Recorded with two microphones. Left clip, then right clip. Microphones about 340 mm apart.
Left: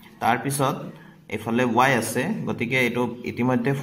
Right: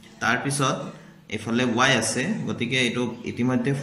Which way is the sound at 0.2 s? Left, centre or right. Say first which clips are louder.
Left 1 dB; left.